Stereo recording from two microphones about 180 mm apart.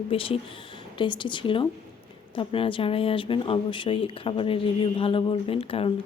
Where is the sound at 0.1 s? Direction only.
30° left (ahead or behind).